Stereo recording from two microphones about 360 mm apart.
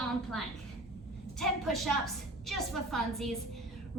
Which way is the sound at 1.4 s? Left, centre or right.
Centre.